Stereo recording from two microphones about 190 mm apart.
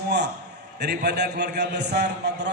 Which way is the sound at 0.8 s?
60° right (ahead or behind).